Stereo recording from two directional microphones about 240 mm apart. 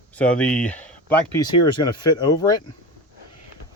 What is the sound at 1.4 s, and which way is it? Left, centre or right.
Speech, centre.